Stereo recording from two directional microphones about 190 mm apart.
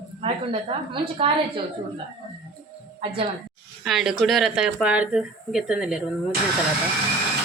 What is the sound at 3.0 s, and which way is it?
Speech, 30° right (ahead or behind).